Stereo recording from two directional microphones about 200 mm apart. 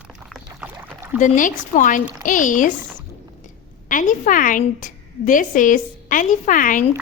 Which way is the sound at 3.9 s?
40° left (ahead or behind).